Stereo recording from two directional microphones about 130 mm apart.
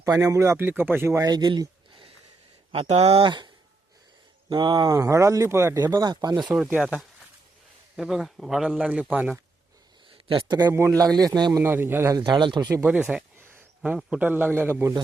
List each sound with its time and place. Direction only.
0.0 s speech: 25° right (ahead or behind)
1.2 s a sound: 30° right (ahead or behind)
2.7 s speech: 50° right (ahead or behind); by 6.5 s 35° right (ahead or behind)
6.6 s a man's voice: 10° right (ahead or behind)
7.9 s a man's voice: centre (ahead or behind)
10.1 s speech: 40° right (ahead or behind)
11.6 s a man's voice: 15° right (ahead or behind)
12.2 s speech: 35° right (ahead or behind)
12.8 s a man's voice: 10° right (ahead or behind)
13.3 s a sound: 20° right (ahead or behind)
13.8 s a man's voice: 10° right (ahead or behind)